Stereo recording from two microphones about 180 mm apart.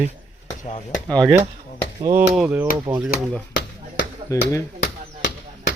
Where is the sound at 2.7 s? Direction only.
20° right (ahead or behind).